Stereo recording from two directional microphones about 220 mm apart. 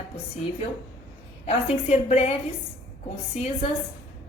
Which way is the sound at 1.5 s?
30° left (ahead or behind).